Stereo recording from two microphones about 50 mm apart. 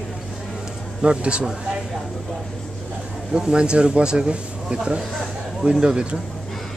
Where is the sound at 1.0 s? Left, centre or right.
Right.